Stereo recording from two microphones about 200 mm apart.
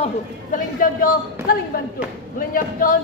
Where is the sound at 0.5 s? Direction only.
45° left (ahead or behind).